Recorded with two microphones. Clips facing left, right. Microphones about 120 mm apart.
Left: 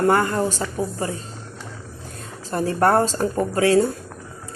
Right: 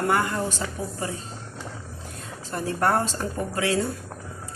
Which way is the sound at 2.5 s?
40° left (ahead or behind).